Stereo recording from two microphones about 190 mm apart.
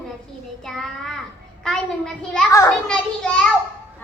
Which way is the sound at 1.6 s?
5° left (ahead or behind).